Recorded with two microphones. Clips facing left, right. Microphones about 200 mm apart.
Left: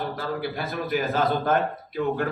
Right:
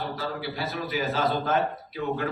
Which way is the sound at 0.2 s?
50° left (ahead or behind).